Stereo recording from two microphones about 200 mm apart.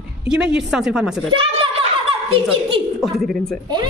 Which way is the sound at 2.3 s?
25° right (ahead or behind).